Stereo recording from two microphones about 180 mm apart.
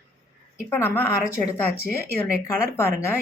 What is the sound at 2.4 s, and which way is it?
Speech, 15° left (ahead or behind).